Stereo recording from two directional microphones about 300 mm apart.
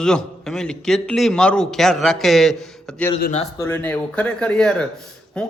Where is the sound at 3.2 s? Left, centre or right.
Left.